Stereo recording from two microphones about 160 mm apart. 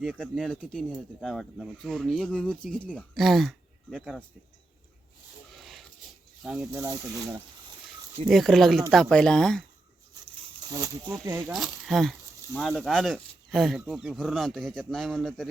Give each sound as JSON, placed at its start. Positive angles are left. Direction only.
{"t": 0.0, "sound": "speech", "side_deg": 0}
{"t": 5.5, "sound": "a sound", "side_deg": 0}
{"t": 6.4, "sound": "speech", "side_deg": -5}
{"t": 6.8, "sound": "speech", "side_deg": -20}
{"t": 8.3, "sound": "speech", "side_deg": 0}
{"t": 10.7, "sound": "speech", "side_deg": -20}
{"t": 11.4, "sound": "speech", "side_deg": 0}